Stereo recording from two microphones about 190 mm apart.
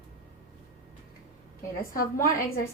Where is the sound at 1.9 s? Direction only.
50° left (ahead or behind).